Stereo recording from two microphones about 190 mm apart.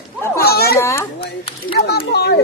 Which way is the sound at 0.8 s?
15° left (ahead or behind).